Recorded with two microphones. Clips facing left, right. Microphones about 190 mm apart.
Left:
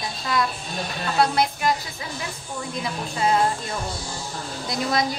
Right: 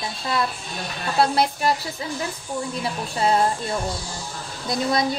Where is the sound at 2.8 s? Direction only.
30° right (ahead or behind).